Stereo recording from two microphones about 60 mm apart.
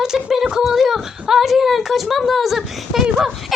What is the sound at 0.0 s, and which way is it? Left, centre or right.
Speech, centre.